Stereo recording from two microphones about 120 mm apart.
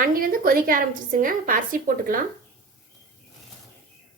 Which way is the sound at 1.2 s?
90° right.